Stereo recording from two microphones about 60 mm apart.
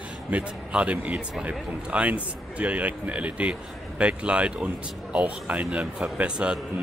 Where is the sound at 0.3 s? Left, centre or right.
Right.